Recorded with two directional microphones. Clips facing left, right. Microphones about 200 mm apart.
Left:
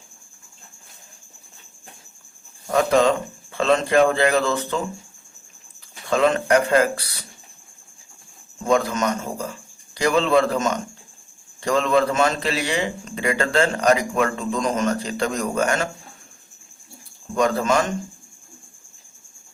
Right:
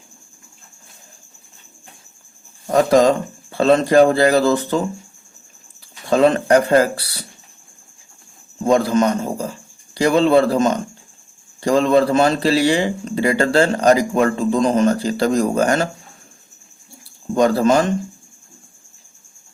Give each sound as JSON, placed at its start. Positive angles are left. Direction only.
{"t": 2.6, "sound": "a man's voice", "side_deg": -35}
{"t": 6.1, "sound": "a man's voice", "side_deg": -35}
{"t": 8.6, "sound": "a man's voice", "side_deg": -30}
{"t": 17.3, "sound": "a man's voice", "side_deg": -30}